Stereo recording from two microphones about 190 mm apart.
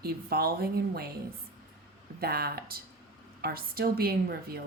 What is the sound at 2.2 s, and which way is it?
A woman's voice, 55° right (ahead or behind).